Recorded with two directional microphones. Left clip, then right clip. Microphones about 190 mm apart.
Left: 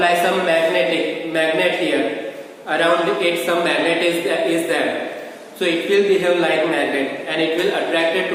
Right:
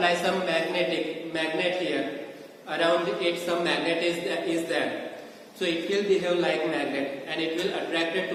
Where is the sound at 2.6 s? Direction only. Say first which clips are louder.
Left 8 dB; 15° left (ahead or behind).